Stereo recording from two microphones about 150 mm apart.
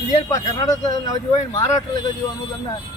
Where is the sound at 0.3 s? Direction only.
25° left (ahead or behind).